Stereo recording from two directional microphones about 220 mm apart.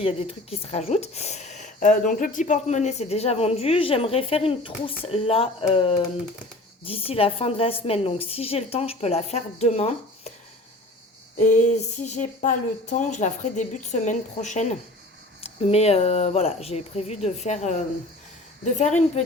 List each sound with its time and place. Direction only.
0.0 s speech: 25° left (ahead or behind)
11.3 s speech: 35° left (ahead or behind)